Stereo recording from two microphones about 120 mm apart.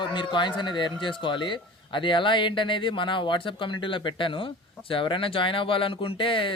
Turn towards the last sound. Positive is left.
turn(degrees=45)  # may be behind; listen again after turning